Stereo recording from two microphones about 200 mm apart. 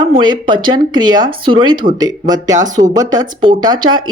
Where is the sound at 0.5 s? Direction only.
25° right (ahead or behind).